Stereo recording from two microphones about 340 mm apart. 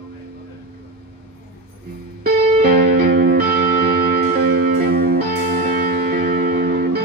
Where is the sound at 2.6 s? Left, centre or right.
Right.